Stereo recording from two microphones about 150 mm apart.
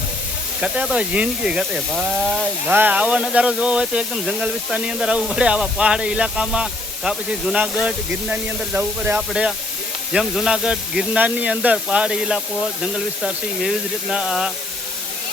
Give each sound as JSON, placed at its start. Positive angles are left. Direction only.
{"t": 0.6, "sound": "speech", "side_deg": -5}